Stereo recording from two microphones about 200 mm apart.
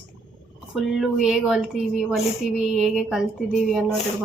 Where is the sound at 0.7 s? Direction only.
Centre (ahead or behind).